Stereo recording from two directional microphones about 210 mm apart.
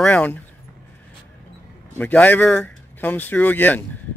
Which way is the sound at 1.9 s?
10° left (ahead or behind).